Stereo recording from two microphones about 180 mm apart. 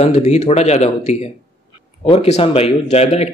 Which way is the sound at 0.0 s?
40° left (ahead or behind).